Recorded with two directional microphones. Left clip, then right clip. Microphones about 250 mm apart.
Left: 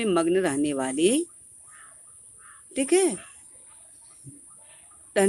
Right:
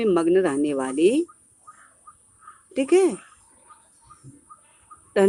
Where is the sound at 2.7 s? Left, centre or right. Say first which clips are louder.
Right 4 dB; centre.